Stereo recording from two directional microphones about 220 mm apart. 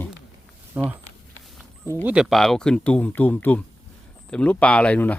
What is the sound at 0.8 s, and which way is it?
Speech, 5° right (ahead or behind).